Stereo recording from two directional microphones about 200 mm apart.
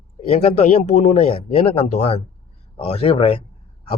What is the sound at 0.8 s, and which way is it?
A man's voice, 35° left (ahead or behind).